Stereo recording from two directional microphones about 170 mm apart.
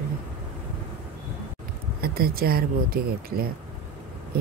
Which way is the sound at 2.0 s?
60° right (ahead or behind).